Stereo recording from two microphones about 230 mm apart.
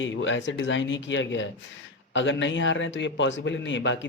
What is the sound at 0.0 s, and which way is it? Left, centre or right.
A man's voice, left.